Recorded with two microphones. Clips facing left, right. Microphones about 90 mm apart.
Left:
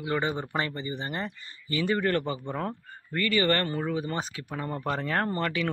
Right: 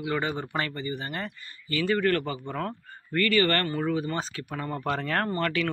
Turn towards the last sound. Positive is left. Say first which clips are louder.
# right 1 dB
turn(degrees=15)  # may be behind; listen again after turning